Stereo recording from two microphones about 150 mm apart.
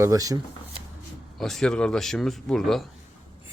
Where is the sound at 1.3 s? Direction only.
Centre (ahead or behind).